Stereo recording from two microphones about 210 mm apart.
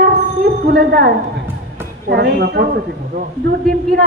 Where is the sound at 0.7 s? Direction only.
50° right (ahead or behind).